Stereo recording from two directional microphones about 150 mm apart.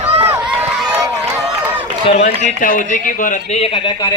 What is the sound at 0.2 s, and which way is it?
Run, 15° right (ahead or behind).